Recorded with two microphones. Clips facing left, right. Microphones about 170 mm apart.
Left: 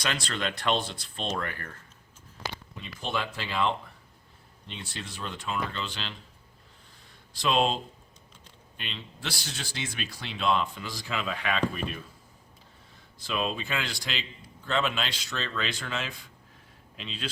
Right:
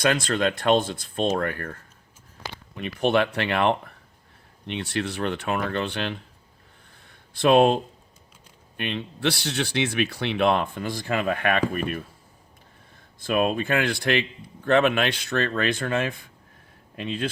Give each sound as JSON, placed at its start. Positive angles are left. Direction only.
{"t": 0.0, "sound": "speech", "side_deg": -50}
{"t": 2.7, "sound": "speech", "side_deg": -65}
{"t": 7.1, "sound": "a sound", "side_deg": -60}
{"t": 8.8, "sound": "speech", "side_deg": -60}
{"t": 13.1, "sound": "speech", "side_deg": -55}